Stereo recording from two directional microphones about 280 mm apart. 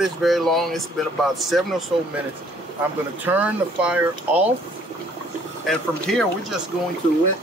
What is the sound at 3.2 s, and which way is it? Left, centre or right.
Speech, centre.